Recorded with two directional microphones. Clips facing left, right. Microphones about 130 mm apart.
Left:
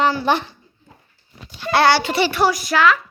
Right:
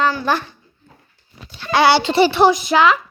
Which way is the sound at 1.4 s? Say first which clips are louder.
Even; 10° left (ahead or behind).